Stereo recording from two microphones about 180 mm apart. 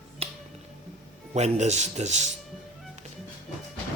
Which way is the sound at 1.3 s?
40° right (ahead or behind).